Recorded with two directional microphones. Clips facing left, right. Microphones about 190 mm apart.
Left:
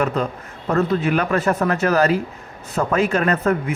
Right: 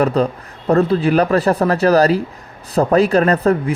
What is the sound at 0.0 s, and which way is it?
Speech, 35° right (ahead or behind).